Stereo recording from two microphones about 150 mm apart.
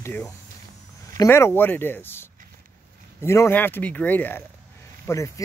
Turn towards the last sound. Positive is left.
turn(degrees=20)  # may be behind; listen again after turning